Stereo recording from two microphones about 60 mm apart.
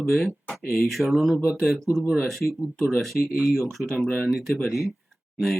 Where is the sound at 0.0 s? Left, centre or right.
Centre.